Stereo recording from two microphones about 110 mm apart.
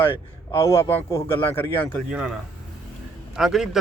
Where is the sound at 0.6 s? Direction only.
25° left (ahead or behind).